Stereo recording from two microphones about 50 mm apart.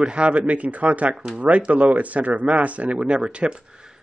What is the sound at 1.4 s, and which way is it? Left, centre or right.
Speech, right.